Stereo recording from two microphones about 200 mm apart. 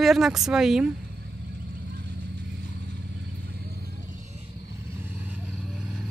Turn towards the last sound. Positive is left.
turn(degrees=-5)  # may be behind; listen again after turning